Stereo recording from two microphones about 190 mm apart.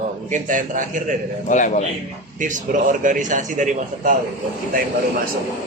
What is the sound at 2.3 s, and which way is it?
A man's voice, 40° right (ahead or behind).